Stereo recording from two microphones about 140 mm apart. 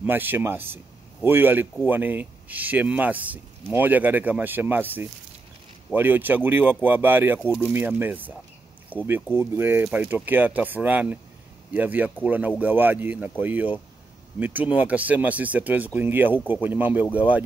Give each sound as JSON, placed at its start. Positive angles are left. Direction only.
{"t": 0.0, "sound": "speech", "side_deg": -15}